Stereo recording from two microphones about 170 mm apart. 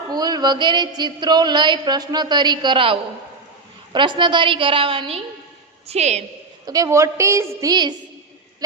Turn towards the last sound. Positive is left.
turn(degrees=-25)  # may be behind; listen again after turning